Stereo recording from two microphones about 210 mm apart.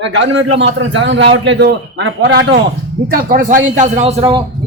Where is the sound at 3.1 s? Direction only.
40° right (ahead or behind).